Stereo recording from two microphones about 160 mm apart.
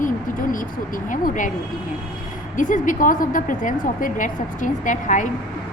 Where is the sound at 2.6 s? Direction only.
55° left (ahead or behind).